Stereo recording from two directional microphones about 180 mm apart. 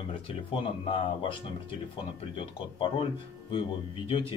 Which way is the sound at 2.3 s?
30° left (ahead or behind).